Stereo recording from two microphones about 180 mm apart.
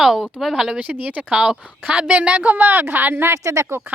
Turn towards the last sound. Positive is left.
turn(degrees=-15)  # may be behind; listen again after turning